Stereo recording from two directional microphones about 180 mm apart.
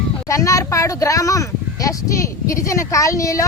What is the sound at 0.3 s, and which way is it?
Speech, 20° left (ahead or behind).